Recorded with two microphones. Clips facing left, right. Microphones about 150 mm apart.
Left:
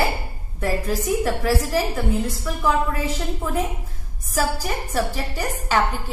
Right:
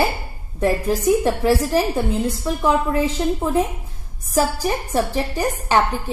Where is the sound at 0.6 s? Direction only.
20° right (ahead or behind).